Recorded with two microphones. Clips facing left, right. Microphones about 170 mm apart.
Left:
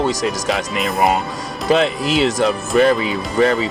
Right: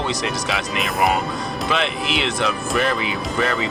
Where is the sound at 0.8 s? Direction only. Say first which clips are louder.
Left 2 dB; centre (ahead or behind).